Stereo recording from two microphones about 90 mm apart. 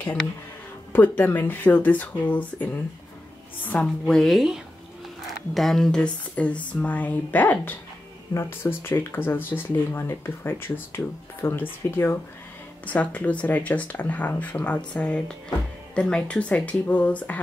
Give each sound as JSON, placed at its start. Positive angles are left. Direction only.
{"t": 0.0, "sound": "speech", "side_deg": 15}
{"t": 4.1, "sound": "speech", "side_deg": 0}